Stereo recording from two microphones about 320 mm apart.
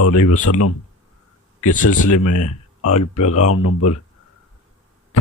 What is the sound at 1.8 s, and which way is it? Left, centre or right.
Speech, left.